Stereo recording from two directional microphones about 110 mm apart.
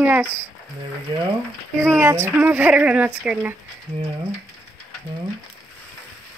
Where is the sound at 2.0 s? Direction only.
20° right (ahead or behind).